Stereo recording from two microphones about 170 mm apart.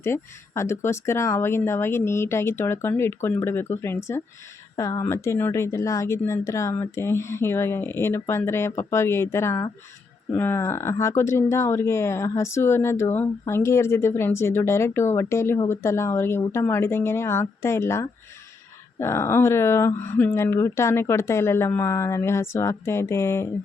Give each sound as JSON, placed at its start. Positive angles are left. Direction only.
{"t": 0.0, "sound": "speech", "side_deg": 15}